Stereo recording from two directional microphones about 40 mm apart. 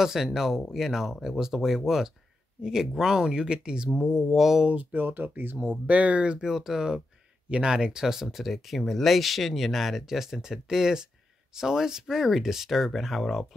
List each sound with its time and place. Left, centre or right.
0.0 s speech: centre
4.3 s speech: centre
4.9 s speech: right
5.9 s speech: right
6.4 s speech: centre
7.4 s speech: right; by 13.6 s centre